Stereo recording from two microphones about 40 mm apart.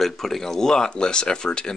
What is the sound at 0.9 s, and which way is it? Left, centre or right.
Speech, left.